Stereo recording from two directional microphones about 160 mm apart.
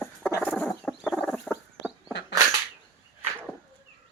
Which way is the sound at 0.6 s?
5° left (ahead or behind).